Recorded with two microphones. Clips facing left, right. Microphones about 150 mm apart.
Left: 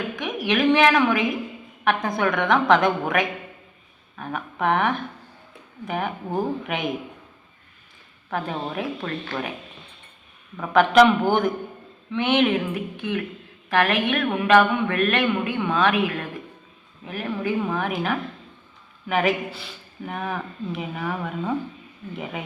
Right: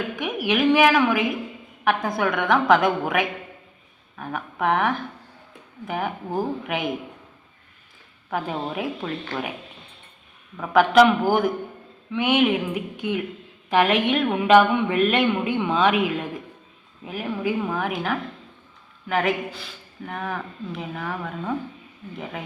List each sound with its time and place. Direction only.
0.2 s speech: 10° right (ahead or behind)
8.3 s speech: 5° right (ahead or behind)
10.6 s speech: 5° right (ahead or behind)